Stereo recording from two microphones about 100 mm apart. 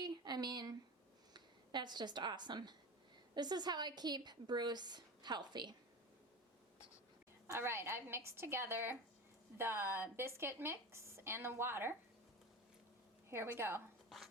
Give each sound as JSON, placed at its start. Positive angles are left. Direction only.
{"t": 0.0, "sound": "a sound", "side_deg": -45}
{"t": 1.3, "sound": "a woman's voice", "side_deg": -45}
{"t": 7.4, "sound": "speech", "side_deg": -25}
{"t": 13.3, "sound": "speech", "side_deg": -25}